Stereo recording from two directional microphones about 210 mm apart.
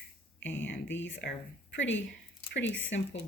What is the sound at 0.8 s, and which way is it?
Speech, 10° left (ahead or behind).